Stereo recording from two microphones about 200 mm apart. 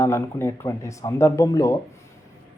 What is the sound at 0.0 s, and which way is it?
Speech, 15° left (ahead or behind).